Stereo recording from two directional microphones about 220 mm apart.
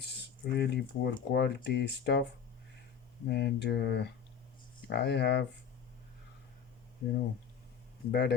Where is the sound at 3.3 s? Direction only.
50° left (ahead or behind).